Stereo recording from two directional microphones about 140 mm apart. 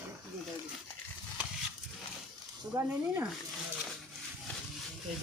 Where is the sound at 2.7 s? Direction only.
20° right (ahead or behind).